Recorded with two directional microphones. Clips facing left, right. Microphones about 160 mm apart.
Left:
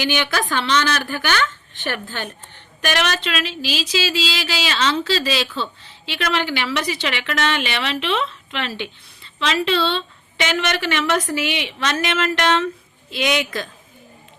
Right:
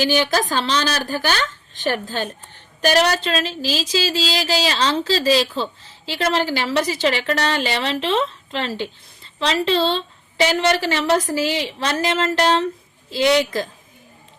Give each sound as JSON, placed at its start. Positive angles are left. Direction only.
{"t": 0.0, "sound": "a woman's voice", "side_deg": -35}